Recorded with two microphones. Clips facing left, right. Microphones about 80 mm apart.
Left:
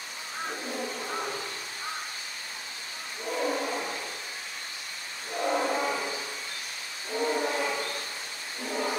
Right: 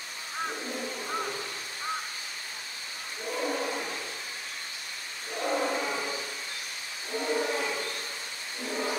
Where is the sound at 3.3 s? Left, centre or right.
Centre.